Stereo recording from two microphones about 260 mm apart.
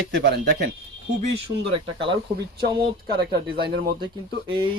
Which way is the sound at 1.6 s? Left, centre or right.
Right.